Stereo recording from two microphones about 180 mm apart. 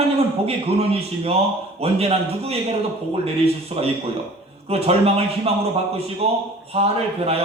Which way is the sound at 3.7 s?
30° right (ahead or behind).